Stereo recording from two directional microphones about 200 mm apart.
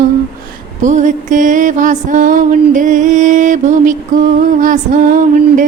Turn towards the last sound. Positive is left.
turn(degrees=-40)  # may be behind; listen again after turning